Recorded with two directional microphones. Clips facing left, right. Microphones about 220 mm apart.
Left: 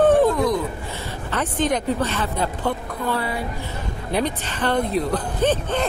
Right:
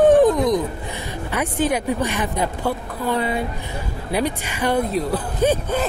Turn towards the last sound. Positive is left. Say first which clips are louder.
# right 2 dB
turn(degrees=-10)  # may be behind; listen again after turning